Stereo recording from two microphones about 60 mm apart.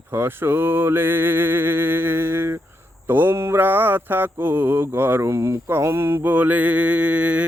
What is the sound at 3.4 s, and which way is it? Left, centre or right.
Mantra, right.